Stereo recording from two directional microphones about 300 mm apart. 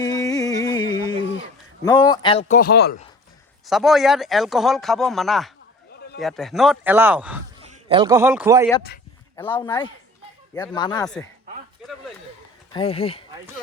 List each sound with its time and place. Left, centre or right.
0.0 s music: centre
1.8 s speech: centre
2.5 s speech: left
3.7 s speech: centre
7.6 s a man's voice: centre
9.3 s speech: centre
11.0 s speech: centre
12.7 s speech: centre